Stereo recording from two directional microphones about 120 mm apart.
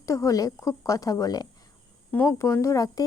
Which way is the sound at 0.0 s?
25° left (ahead or behind).